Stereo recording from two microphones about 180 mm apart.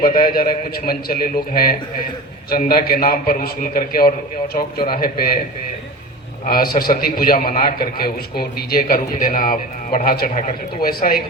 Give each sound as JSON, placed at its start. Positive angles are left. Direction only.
{"t": 0.0, "sound": "a man's voice", "side_deg": 55}
{"t": 6.4, "sound": "a man's voice", "side_deg": 55}